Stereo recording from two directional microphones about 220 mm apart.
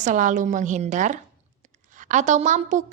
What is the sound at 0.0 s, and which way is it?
A woman's voice, 35° right (ahead or behind).